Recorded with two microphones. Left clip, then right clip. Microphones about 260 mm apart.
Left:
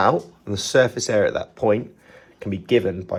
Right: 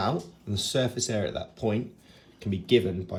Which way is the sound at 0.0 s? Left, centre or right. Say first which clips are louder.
Left 11 dB; centre.